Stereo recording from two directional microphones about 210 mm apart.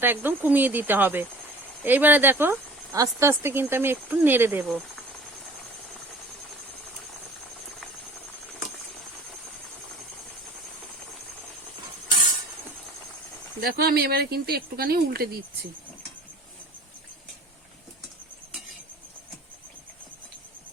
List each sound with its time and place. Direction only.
0.0 s speech: 10° right (ahead or behind)
13.6 s speech: 45° right (ahead or behind)